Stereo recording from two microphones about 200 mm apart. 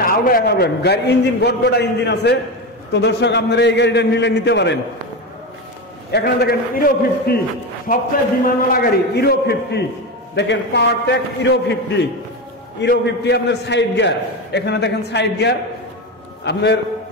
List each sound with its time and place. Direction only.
0.0 s a man's voice: 45° left (ahead or behind)
6.1 s a man's voice: 50° left (ahead or behind)